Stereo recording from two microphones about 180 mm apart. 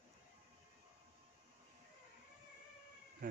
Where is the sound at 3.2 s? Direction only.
50° right (ahead or behind).